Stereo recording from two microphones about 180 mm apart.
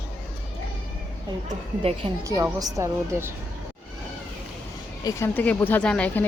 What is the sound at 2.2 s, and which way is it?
A woman's voice, 20° right (ahead or behind).